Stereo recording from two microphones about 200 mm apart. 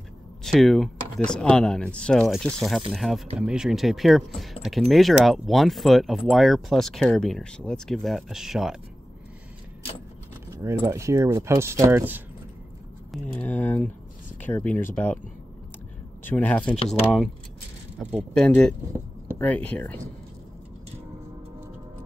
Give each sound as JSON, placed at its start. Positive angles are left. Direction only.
{"t": 0.4, "sound": "speech", "side_deg": 0}
{"t": 10.5, "sound": "speech", "side_deg": -15}
{"t": 13.4, "sound": "speech", "side_deg": 10}
{"t": 16.3, "sound": "speech", "side_deg": 10}
{"t": 18.3, "sound": "speech", "side_deg": 5}